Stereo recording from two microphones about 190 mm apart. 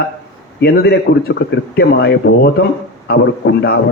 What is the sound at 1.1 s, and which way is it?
A man's voice, 55° left (ahead or behind).